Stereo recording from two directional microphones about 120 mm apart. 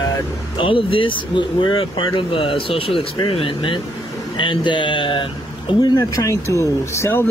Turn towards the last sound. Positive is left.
turn(degrees=20)  # may be behind; listen again after turning